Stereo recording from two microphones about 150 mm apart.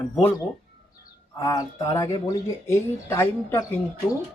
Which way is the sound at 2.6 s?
20° left (ahead or behind).